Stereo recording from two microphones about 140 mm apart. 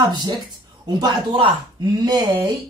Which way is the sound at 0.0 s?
30° right (ahead or behind).